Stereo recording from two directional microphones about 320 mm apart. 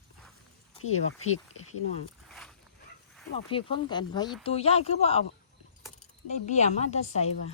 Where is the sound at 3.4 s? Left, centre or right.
Centre.